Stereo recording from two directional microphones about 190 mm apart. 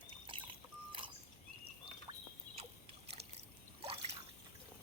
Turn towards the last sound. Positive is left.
turn(degrees=-30)  # may be behind; listen again after turning